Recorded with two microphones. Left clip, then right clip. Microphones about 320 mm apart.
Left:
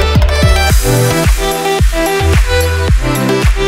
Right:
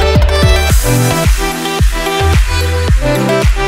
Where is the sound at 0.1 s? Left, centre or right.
Centre.